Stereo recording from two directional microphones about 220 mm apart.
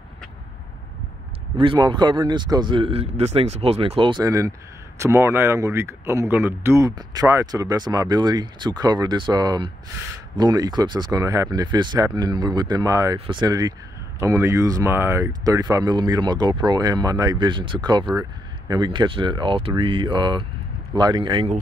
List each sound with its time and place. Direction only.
1.6 s speech: 20° right (ahead or behind)